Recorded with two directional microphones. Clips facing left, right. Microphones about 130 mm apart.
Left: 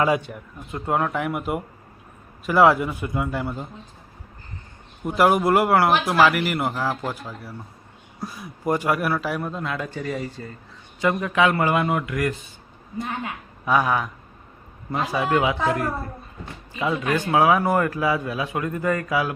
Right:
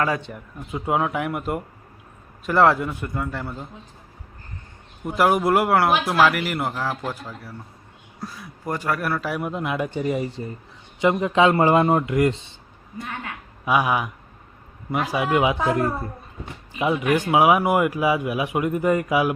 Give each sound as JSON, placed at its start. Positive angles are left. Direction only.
{"t": 0.0, "sound": "a man's voice", "side_deg": 15}
{"t": 0.3, "sound": "a man's voice", "side_deg": 0}
{"t": 5.0, "sound": "a man's voice", "side_deg": 0}
{"t": 9.4, "sound": "speech", "side_deg": -20}
{"t": 13.0, "sound": "a woman's voice", "side_deg": 25}
{"t": 13.7, "sound": "speech", "side_deg": -10}